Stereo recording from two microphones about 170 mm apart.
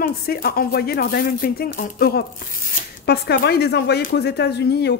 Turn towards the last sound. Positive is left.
turn(degrees=75)  # may be behind; listen again after turning